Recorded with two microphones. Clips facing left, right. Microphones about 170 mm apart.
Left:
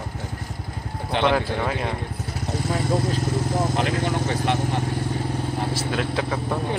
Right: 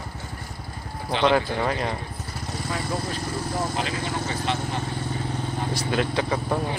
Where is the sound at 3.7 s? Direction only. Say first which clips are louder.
Left 5 dB; 60° left (ahead or behind).